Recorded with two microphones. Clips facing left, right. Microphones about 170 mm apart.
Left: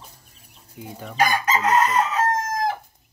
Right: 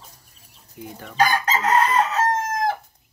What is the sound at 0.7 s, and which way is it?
Speech, 15° left (ahead or behind).